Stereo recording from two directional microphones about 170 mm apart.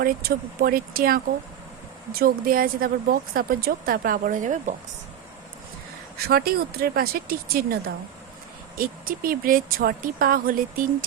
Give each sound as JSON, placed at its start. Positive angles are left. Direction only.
{"t": 0.0, "sound": "speech", "side_deg": -60}
{"t": 6.1, "sound": "speech", "side_deg": -65}
{"t": 8.8, "sound": "speech", "side_deg": -60}